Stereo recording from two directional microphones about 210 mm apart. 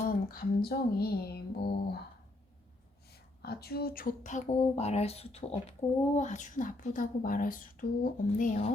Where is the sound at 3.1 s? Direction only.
50° left (ahead or behind).